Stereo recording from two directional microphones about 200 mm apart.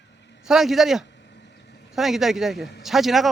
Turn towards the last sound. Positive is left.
turn(degrees=0)  # may be behind; listen again after turning